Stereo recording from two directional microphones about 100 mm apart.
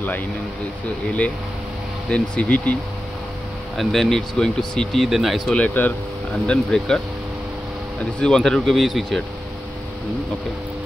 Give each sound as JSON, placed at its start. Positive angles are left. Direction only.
{"t": 2.0, "sound": "speech", "side_deg": 10}
{"t": 3.7, "sound": "speech", "side_deg": 0}
{"t": 5.6, "sound": "speech", "side_deg": 15}
{"t": 8.2, "sound": "speech", "side_deg": 5}